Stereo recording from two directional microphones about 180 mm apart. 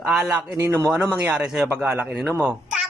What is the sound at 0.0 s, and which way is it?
Speech, centre (ahead or behind).